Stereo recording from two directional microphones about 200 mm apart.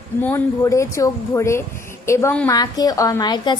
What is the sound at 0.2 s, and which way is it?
A woman's voice, 10° left (ahead or behind).